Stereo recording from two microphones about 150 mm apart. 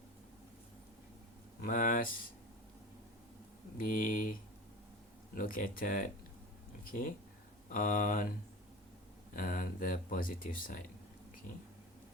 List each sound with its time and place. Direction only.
1.6 s speech: 65° left (ahead or behind)
3.8 s speech: 65° left (ahead or behind)
7.7 s speech: 65° left (ahead or behind)
9.3 s speech: 65° left (ahead or behind)